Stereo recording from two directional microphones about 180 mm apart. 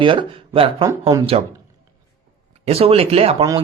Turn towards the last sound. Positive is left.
turn(degrees=-35)  # may be behind; listen again after turning